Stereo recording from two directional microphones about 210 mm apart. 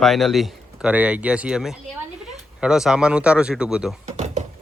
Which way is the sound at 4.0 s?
35° right (ahead or behind).